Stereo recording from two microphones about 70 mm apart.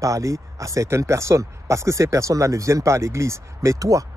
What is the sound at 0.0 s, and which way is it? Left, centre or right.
Speech, right.